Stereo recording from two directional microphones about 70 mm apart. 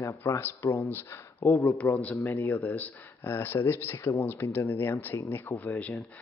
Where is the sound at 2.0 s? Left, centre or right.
Left.